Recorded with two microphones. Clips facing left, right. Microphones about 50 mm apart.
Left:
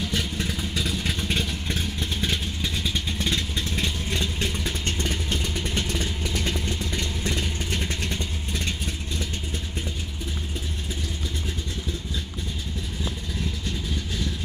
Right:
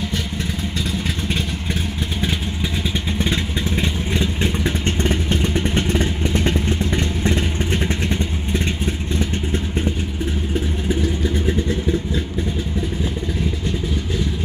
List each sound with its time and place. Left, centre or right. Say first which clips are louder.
0.1 s vehicle: right 3 dB; centre
3.2 s vehicle: right 5 dB; right